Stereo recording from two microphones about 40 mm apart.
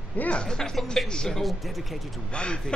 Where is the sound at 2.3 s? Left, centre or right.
Left.